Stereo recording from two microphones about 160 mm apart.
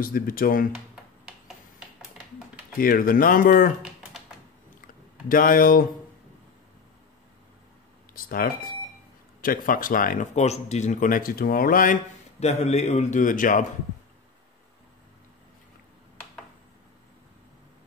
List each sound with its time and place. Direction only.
0.0 s speech: 65° left (ahead or behind)
2.8 s speech: 65° left (ahead or behind)
5.3 s speech: 60° left (ahead or behind)
8.1 s speech: 60° left (ahead or behind)
12.4 s a man's voice: 45° left (ahead or behind)